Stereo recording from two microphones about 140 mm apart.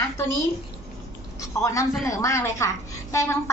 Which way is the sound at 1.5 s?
20° left (ahead or behind).